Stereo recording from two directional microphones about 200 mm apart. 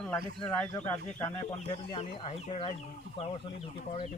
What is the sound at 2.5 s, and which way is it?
Speech, 30° left (ahead or behind).